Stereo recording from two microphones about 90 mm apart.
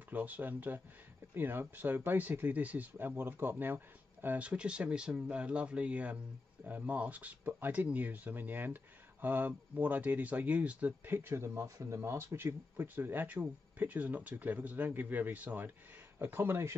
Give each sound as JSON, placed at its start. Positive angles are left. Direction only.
{"t": 0.1, "sound": "speech", "side_deg": -20}